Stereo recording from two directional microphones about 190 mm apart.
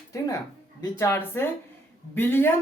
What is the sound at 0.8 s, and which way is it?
A woman's voice, 15° left (ahead or behind).